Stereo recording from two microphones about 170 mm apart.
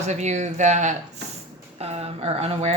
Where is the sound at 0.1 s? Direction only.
40° right (ahead or behind).